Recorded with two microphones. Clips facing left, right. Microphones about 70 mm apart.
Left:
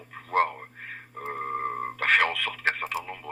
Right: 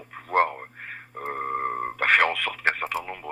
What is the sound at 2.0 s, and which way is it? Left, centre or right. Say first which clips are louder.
Radio: right 2 dB; right.